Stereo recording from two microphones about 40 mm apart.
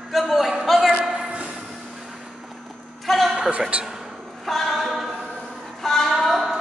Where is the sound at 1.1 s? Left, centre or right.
Right.